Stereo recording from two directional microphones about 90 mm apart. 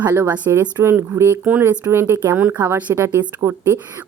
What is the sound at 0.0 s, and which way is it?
A woman's voice, 25° right (ahead or behind).